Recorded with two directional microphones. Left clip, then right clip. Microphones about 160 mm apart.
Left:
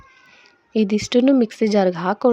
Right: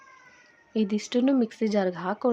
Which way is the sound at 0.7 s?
40° left (ahead or behind).